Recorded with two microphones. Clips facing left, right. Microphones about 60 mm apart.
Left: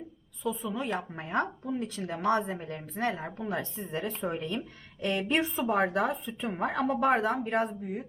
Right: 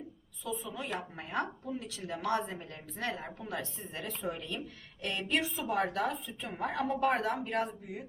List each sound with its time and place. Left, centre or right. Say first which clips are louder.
0.7 s a woman's voice: left 6 dB; left